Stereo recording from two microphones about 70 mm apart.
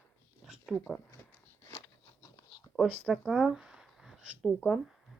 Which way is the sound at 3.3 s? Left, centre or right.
Centre.